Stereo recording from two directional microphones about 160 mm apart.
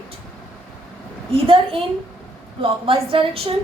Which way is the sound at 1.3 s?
35° right (ahead or behind).